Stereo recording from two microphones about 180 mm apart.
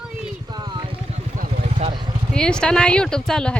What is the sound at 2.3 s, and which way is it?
A woman's voice, 5° left (ahead or behind).